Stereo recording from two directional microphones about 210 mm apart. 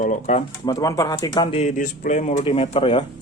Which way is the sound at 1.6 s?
35° left (ahead or behind).